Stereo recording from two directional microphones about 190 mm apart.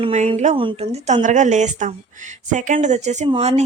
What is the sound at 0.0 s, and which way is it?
Speech, 35° right (ahead or behind).